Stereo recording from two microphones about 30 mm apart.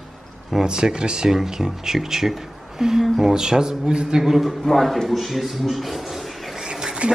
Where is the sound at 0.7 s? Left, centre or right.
Right.